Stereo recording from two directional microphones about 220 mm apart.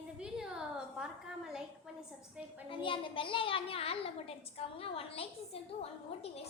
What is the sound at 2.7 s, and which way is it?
A woman's voice, 25° left (ahead or behind).